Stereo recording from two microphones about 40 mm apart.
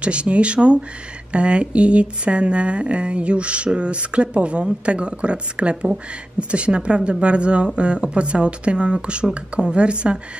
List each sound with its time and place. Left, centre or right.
0.0 s speech: right